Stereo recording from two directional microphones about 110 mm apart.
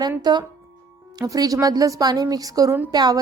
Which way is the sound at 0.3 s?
40° right (ahead or behind).